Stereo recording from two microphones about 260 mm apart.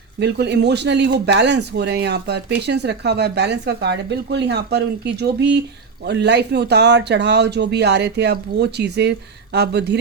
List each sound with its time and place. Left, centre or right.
0.2 s speech: right